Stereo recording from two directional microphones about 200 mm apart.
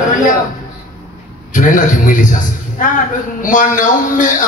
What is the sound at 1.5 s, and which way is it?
A man's voice, 40° left (ahead or behind).